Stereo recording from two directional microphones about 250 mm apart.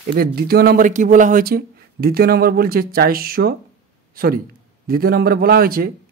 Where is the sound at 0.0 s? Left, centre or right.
Right.